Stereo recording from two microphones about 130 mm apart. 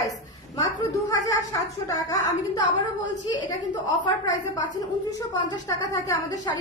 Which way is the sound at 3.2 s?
30° left (ahead or behind).